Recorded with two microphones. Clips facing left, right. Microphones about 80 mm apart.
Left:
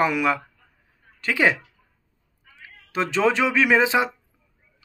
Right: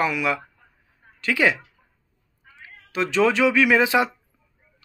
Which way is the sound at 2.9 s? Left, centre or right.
Left.